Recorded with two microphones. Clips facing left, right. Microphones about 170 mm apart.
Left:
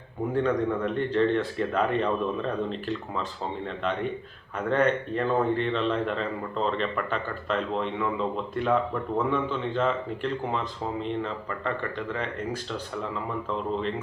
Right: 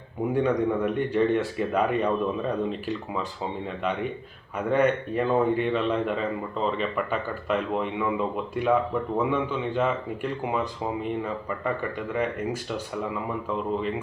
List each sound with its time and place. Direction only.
0.3 s a man's voice: 15° right (ahead or behind)
4.7 s a man's voice: 10° right (ahead or behind)
9.1 s a man's voice: 10° right (ahead or behind)